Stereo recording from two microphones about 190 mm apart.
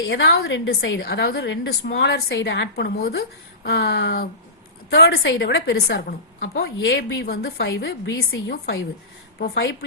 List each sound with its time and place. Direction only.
0.1 s a woman's voice: 65° left (ahead or behind)